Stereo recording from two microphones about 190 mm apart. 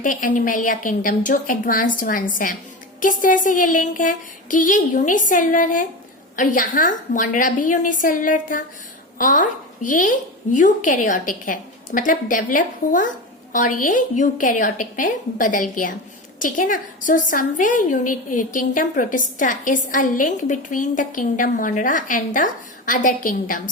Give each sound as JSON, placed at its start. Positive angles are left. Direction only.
{"t": 0.0, "sound": "a woman's voice", "side_deg": 45}